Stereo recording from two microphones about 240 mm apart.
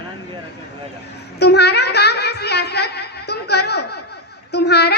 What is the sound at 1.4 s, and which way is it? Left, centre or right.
A woman's voice, left.